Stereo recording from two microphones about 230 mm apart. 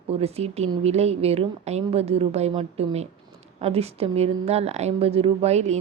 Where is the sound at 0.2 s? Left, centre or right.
Right.